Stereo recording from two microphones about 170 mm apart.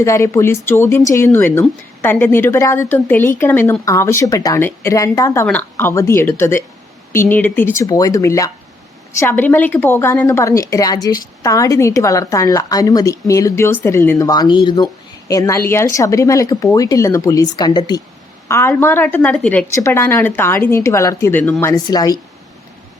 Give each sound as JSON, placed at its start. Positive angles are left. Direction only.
{"t": 0.0, "sound": "a woman's voice", "side_deg": 15}